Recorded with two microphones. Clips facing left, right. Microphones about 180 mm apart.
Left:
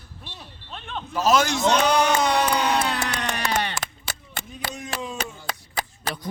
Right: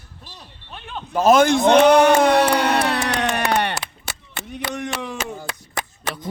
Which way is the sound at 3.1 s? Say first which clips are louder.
Right 6 dB; 65° right (ahead or behind).